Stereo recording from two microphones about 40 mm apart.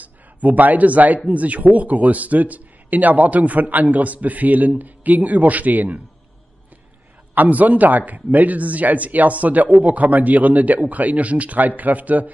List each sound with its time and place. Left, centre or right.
0.0 s a man's voice: right
7.3 s a man's voice: right